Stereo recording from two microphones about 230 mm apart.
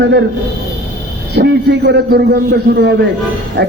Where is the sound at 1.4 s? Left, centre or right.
Right.